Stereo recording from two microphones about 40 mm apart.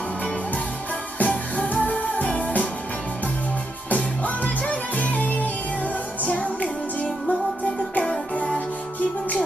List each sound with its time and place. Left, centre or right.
1.2 s music: left
3.9 s music: left